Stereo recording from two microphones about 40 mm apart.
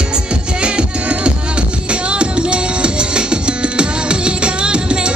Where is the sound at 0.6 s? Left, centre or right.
Right.